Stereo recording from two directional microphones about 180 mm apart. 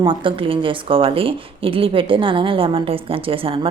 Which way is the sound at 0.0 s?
30° right (ahead or behind).